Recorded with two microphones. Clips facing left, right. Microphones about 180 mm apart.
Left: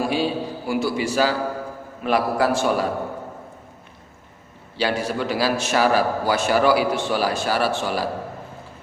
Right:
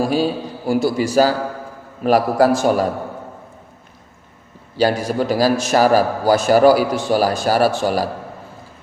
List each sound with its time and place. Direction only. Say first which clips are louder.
0.0 s a man's voice: right 4 dB; 40° right (ahead or behind)
4.8 s a man's voice: right 6 dB; 40° right (ahead or behind)